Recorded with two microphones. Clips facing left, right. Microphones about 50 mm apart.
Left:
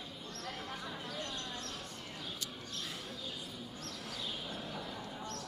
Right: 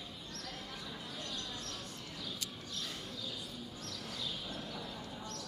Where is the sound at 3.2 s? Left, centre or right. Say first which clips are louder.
Even; left; by 5.2 s centre.